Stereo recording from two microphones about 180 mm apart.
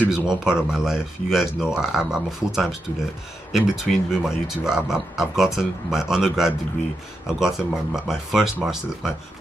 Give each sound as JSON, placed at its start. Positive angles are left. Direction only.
{"t": 0.0, "sound": "speech", "side_deg": -5}